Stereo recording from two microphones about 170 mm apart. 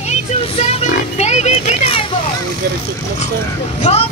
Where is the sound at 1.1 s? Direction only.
40° left (ahead or behind).